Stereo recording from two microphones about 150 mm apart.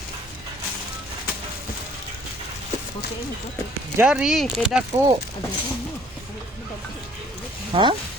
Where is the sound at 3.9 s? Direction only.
5° right (ahead or behind).